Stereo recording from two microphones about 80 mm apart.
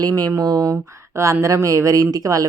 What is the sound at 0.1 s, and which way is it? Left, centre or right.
Speech, right.